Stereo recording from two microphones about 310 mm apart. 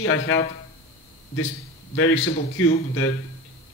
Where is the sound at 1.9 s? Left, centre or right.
Left.